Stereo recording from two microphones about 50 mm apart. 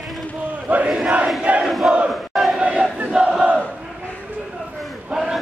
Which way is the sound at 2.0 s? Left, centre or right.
Centre.